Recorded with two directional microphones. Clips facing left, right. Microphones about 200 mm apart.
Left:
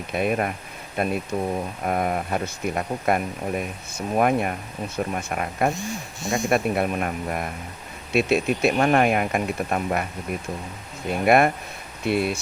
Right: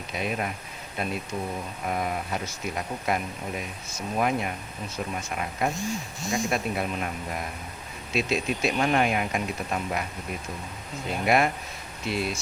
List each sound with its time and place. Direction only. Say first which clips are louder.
0.1 s speech: left 7 dB; 55° left (ahead or behind)
11.3 s speech: left 5 dB; 55° left (ahead or behind)